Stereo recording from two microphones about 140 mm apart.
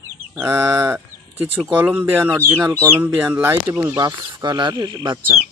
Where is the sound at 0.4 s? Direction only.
15° right (ahead or behind).